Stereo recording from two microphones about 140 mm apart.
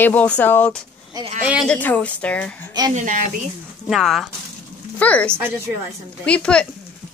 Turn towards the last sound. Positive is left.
turn(degrees=5)  # may be behind; listen again after turning